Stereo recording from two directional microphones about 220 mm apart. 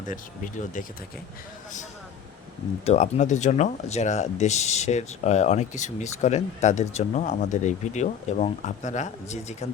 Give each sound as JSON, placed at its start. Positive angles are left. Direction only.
{"t": 0.1, "sound": "speech", "side_deg": 35}
{"t": 2.8, "sound": "speech", "side_deg": 30}